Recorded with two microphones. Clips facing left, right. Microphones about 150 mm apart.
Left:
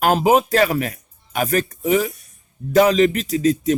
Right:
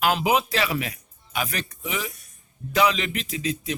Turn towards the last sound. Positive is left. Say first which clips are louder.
# left 11 dB
turn(degrees=45)  # may be behind; listen again after turning